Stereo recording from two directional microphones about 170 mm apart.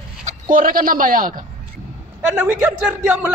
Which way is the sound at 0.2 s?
50° right (ahead or behind).